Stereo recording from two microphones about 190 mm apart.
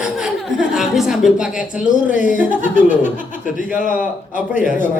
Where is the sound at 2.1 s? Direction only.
40° left (ahead or behind).